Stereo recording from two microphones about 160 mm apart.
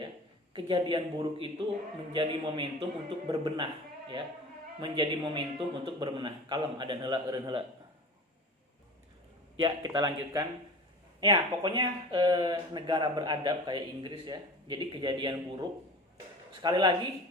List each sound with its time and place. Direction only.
0.5 s speech: 30° right (ahead or behind)
4.8 s speech: 30° right (ahead or behind)
9.6 s speech: 25° right (ahead or behind)